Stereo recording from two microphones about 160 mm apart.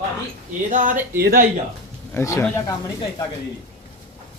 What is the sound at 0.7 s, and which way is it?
Speech, 55° right (ahead or behind).